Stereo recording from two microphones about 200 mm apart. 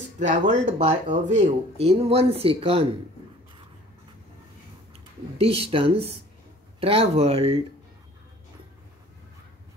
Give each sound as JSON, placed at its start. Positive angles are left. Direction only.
{"t": 0.3, "sound": "speech", "side_deg": -35}
{"t": 5.4, "sound": "speech", "side_deg": -30}